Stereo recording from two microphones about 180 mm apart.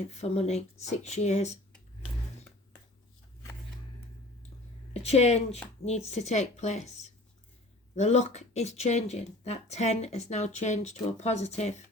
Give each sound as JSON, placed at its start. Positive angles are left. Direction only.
{"t": 0.1, "sound": "speech", "side_deg": 35}
{"t": 5.0, "sound": "speech", "side_deg": 35}